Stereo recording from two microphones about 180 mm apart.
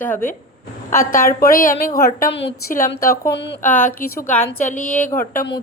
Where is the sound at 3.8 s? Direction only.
55° left (ahead or behind).